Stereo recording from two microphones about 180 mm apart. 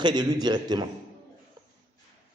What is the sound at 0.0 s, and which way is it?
Speech, 25° right (ahead or behind).